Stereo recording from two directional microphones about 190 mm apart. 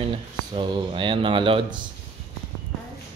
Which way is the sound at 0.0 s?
30° right (ahead or behind).